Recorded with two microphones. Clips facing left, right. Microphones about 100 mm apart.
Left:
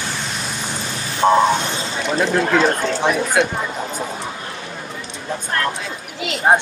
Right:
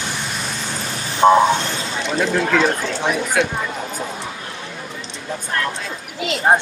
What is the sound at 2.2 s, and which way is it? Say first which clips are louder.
Speech: left 1 dB; 30° left (ahead or behind).